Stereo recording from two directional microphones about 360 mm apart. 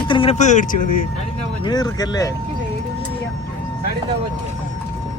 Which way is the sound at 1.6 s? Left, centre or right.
Centre.